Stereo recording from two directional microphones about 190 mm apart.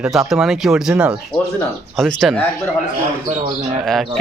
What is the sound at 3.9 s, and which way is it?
Speech, centre (ahead or behind).